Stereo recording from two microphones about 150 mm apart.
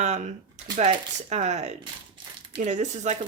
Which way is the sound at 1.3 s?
50° right (ahead or behind).